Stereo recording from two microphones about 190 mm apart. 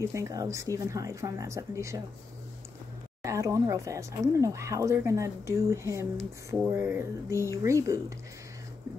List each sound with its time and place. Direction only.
0.0 s speech: 15° right (ahead or behind)
3.2 s speech: 15° right (ahead or behind)